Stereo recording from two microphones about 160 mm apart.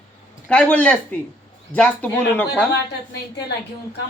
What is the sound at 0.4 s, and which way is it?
Speech, 5° left (ahead or behind).